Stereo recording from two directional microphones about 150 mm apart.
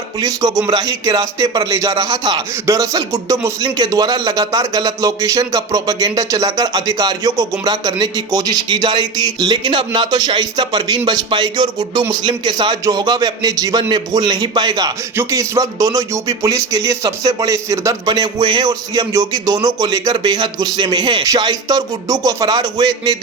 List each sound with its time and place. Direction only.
0.2 s speech: 25° right (ahead or behind)